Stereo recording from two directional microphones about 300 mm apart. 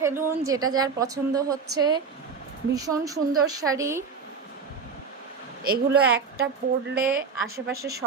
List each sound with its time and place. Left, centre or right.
0.0 s a woman's voice: centre
2.7 s a woman's voice: centre
5.6 s a woman's voice: right